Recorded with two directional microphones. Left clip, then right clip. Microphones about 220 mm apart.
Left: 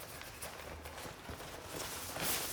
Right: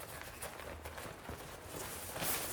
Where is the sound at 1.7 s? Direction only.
Centre (ahead or behind).